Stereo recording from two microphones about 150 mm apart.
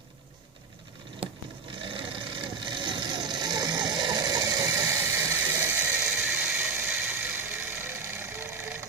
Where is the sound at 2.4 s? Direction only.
30° right (ahead or behind).